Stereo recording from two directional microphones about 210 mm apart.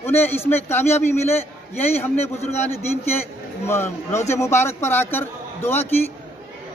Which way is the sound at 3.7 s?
10° left (ahead or behind).